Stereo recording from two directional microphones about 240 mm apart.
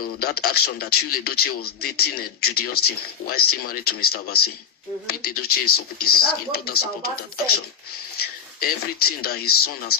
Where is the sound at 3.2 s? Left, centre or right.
Left.